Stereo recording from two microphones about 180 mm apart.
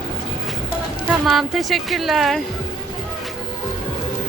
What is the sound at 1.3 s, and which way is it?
Speech, centre (ahead or behind).